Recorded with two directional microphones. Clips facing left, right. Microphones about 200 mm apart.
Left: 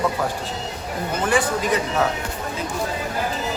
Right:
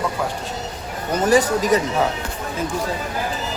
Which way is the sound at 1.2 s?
40° right (ahead or behind).